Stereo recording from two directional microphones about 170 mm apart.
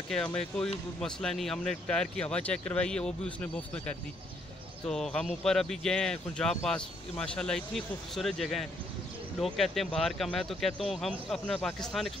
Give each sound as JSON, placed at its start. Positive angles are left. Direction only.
{"t": 0.1, "sound": "speech", "side_deg": 5}